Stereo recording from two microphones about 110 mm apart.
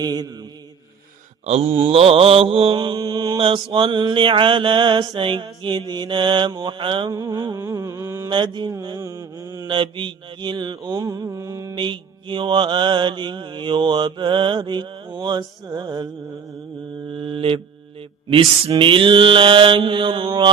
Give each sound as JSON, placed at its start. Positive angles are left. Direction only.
{"t": 0.0, "sound": "mantra", "side_deg": -35}
{"t": 1.5, "sound": "mantra", "side_deg": -65}
{"t": 3.0, "sound": "mantra", "side_deg": -35}
{"t": 3.3, "sound": "mantra", "side_deg": -55}
{"t": 7.1, "sound": "mantra", "side_deg": -35}
{"t": 7.6, "sound": "a sound", "side_deg": -25}
{"t": 8.3, "sound": "mantra", "side_deg": -45}
{"t": 9.0, "sound": "mantra", "side_deg": -30}
{"t": 9.6, "sound": "mantra", "side_deg": -50}
{"t": 11.7, "sound": "mantra", "side_deg": -45}
{"t": 17.1, "sound": "mantra", "side_deg": -55}